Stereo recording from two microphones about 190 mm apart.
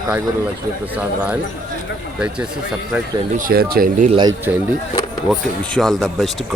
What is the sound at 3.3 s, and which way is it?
Speech, 50° right (ahead or behind).